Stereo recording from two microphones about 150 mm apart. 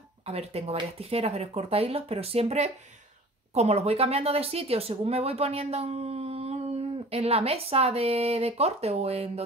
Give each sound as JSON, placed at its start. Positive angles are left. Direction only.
{"t": 0.3, "sound": "speech", "side_deg": -40}